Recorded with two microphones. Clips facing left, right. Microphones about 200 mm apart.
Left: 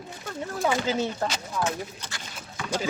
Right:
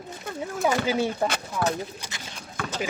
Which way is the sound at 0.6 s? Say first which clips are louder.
Right 2 dB; 10° right (ahead or behind).